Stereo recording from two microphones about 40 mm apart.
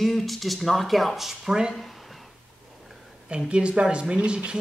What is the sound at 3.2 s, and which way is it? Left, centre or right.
Speech, right.